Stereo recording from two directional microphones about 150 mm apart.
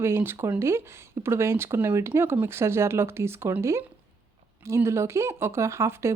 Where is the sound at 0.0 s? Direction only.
15° right (ahead or behind).